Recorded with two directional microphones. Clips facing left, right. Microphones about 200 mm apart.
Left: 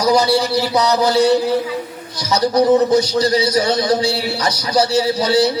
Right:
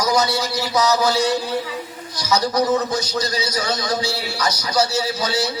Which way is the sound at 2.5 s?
30° left (ahead or behind).